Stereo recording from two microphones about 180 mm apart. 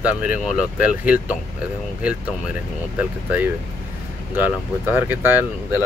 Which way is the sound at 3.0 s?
10° right (ahead or behind).